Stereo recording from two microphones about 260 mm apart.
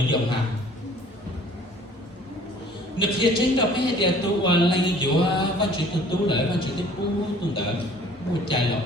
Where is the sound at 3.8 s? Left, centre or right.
Centre.